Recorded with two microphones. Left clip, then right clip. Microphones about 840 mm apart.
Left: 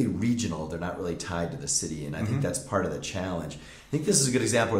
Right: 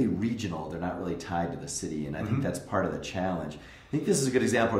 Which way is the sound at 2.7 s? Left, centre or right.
Left.